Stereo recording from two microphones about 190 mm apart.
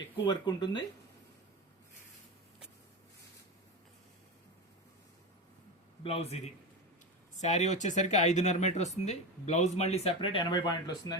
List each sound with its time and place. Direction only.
0.3 s speech: 25° left (ahead or behind)
6.0 s a man's voice: 30° left (ahead or behind)
7.4 s speech: 35° left (ahead or behind); by 11.2 s 20° left (ahead or behind)